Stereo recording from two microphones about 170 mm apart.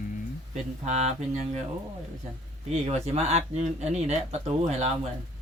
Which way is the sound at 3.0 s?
40° right (ahead or behind).